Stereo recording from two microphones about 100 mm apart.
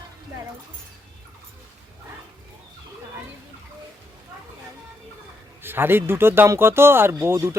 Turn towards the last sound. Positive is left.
turn(degrees=-35)  # may be behind; listen again after turning